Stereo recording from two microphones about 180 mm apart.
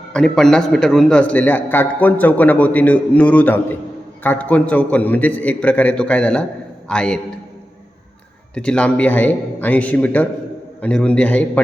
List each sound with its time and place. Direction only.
0.1 s a man's voice: 5° left (ahead or behind)
8.5 s a man's voice: 5° left (ahead or behind)